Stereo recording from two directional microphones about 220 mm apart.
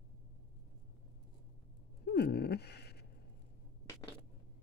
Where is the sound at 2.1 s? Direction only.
45° left (ahead or behind).